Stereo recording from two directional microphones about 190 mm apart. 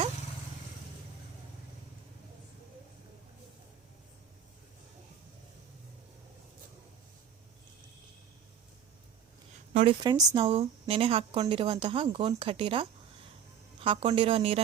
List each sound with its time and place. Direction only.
9.7 s a woman's voice: 25° right (ahead or behind)